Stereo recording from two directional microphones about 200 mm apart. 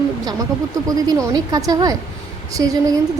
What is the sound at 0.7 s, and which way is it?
Speech, 20° right (ahead or behind).